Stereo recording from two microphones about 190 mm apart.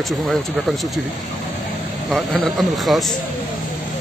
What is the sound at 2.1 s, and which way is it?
Speech, centre (ahead or behind).